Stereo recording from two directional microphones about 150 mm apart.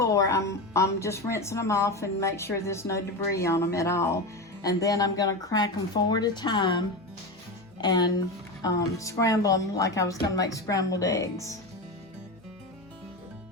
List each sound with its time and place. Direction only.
0.0 s speech: 20° left (ahead or behind)